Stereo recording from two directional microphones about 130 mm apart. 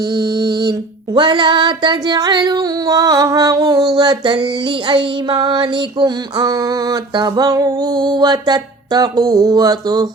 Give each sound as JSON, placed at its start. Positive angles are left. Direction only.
{"t": 0.1, "sound": "female singing", "side_deg": -30}